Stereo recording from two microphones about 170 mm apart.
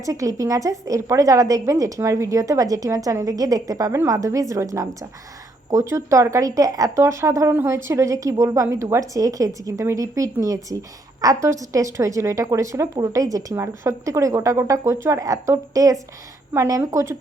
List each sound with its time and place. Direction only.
0.0 s a woman's voice: 20° right (ahead or behind)